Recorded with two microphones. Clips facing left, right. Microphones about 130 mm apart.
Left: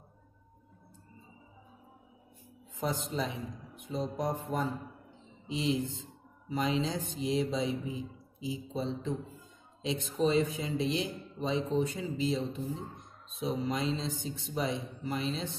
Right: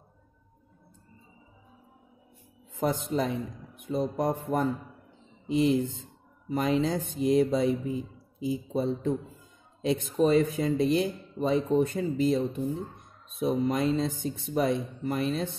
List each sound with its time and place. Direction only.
2.7 s speech: 55° right (ahead or behind)